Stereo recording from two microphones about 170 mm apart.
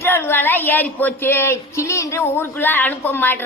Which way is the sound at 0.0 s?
15° left (ahead or behind).